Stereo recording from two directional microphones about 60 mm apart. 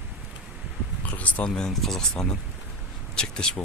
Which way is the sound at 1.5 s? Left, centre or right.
Centre.